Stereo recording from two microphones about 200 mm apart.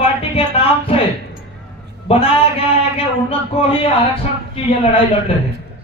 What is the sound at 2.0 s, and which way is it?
A man's voice, 30° left (ahead or behind).